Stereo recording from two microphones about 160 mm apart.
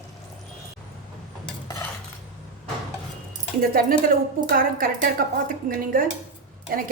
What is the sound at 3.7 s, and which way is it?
A woman's voice, 65° right (ahead or behind).